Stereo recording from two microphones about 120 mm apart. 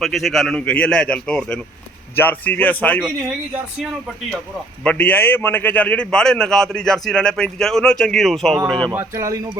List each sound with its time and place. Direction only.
0.0 s a man's voice: centre (ahead or behind)
4.8 s a man's voice: 10° left (ahead or behind)
8.9 s speech: 20° right (ahead or behind)